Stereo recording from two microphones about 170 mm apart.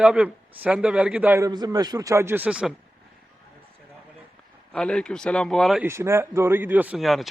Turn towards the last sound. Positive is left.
turn(degrees=0)  # may be behind; listen again after turning